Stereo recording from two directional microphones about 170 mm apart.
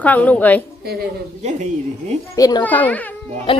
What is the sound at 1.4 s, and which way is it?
Speech, 45° right (ahead or behind).